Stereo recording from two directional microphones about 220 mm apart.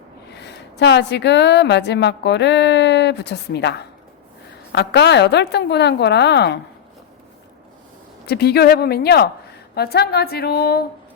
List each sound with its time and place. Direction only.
0.3 s a woman's voice: 50° left (ahead or behind)
8.3 s a woman's voice: 45° left (ahead or behind)